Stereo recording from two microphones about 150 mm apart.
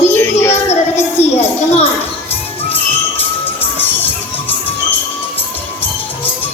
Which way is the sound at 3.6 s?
15° left (ahead or behind).